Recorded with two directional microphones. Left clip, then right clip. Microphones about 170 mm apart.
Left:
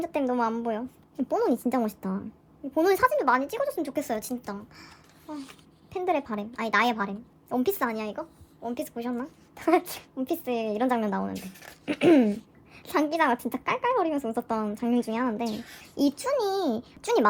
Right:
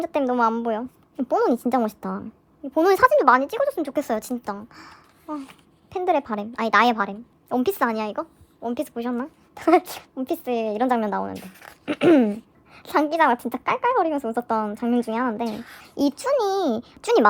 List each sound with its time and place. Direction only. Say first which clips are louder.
0.0 s a woman's voice: right 6 dB; 40° right (ahead or behind)
5.2 s a child's voice: right 6 dB; 40° right (ahead or behind)
11.3 s speech: right 2 dB; 20° right (ahead or behind)
11.9 s a woman's voice: right 3 dB; 40° right (ahead or behind)
15.4 s speech: right 3 dB; 20° right (ahead or behind)
15.8 s a woman's voice: right 3 dB; 40° right (ahead or behind)